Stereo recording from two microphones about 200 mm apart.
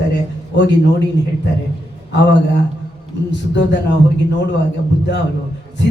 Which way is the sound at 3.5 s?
60° left (ahead or behind).